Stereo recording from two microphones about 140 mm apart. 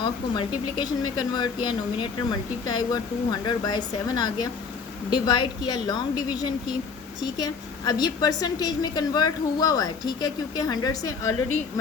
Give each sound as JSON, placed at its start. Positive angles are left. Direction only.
{"t": 0.0, "sound": "a woman's voice", "side_deg": 30}